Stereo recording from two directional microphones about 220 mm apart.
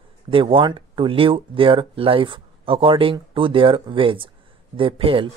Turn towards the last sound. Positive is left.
turn(degrees=-25)  # may be behind; listen again after turning